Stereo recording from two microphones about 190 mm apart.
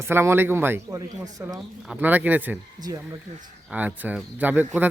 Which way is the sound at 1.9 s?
10° right (ahead or behind).